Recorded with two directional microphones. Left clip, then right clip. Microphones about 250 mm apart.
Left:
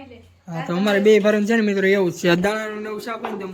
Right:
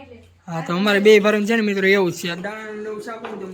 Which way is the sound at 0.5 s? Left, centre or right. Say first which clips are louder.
Right 1 dB; centre.